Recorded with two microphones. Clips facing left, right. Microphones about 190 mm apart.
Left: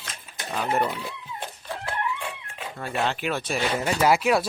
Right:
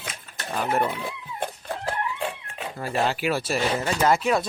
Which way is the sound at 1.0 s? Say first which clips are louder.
Right 4 dB; 50° right (ahead or behind).